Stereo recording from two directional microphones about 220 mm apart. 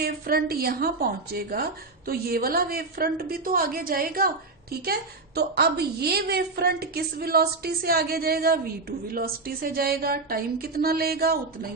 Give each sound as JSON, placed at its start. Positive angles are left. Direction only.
{"t": 0.0, "sound": "a woman's voice", "side_deg": -45}